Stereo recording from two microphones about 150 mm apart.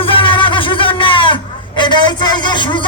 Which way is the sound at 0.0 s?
35° left (ahead or behind).